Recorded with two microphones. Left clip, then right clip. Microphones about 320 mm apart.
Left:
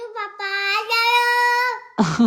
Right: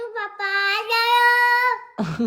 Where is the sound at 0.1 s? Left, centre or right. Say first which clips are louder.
Right 1 dB; centre.